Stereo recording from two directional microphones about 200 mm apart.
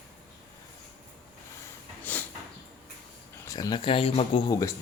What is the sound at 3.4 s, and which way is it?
Speech, 20° left (ahead or behind).